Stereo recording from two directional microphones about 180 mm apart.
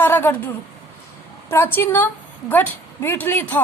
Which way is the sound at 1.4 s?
15° left (ahead or behind).